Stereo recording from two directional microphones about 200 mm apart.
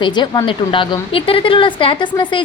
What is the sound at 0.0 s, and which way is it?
Speech, 20° left (ahead or behind).